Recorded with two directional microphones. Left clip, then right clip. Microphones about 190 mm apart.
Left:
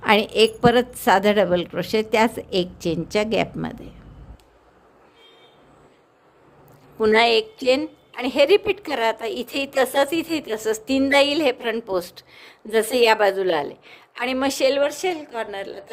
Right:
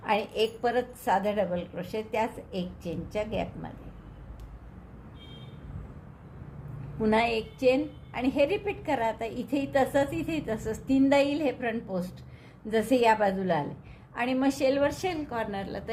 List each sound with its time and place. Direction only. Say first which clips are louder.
0.0 s a woman's voice: left 10 dB; 45° left (ahead or behind)
7.0 s a woman's voice: left 10 dB; 50° left (ahead or behind)